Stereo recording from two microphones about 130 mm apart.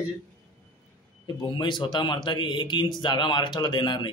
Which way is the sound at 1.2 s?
35° left (ahead or behind).